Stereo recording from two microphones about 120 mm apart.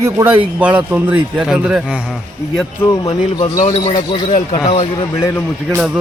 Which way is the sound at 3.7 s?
55° left (ahead or behind).